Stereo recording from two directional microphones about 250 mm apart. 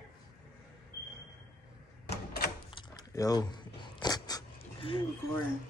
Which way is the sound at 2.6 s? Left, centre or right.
Centre.